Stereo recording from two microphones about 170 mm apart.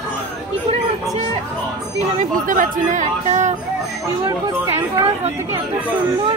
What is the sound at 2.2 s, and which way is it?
Speech, 50° right (ahead or behind).